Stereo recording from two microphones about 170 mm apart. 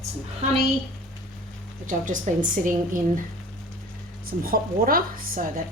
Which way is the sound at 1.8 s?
50° right (ahead or behind).